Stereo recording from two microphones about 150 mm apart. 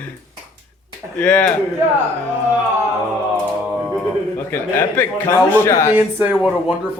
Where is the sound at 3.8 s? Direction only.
Centre (ahead or behind).